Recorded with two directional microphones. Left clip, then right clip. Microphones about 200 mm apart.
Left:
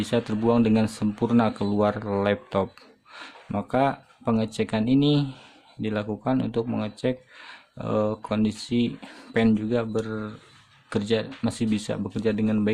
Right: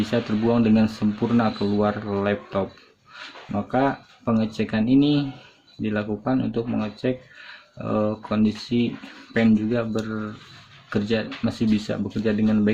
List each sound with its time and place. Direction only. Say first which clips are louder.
0.0 s speech: right 1 dB; 45° left (ahead or behind)